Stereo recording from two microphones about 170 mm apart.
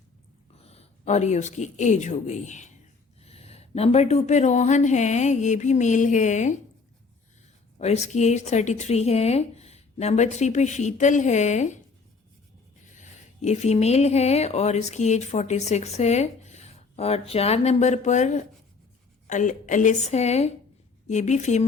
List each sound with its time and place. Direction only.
0.6 s speech: 35° left (ahead or behind)
7.8 s speech: 40° left (ahead or behind)
13.0 s speech: 40° left (ahead or behind)